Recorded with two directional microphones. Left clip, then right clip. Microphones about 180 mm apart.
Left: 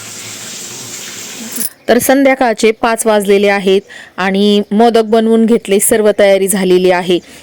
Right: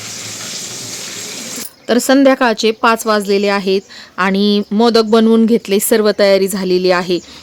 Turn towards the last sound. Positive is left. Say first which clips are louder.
# left 3 dB
turn(degrees=15)  # may be behind; listen again after turning